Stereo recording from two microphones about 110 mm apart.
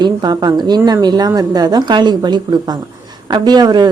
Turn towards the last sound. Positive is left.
turn(degrees=-40)  # may be behind; listen again after turning